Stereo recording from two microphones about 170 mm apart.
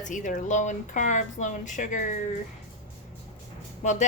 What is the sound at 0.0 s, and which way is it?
A woman's voice, 50° left (ahead or behind).